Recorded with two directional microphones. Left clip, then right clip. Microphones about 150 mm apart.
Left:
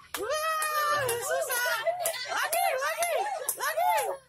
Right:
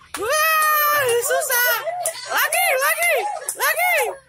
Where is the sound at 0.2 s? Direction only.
15° right (ahead or behind).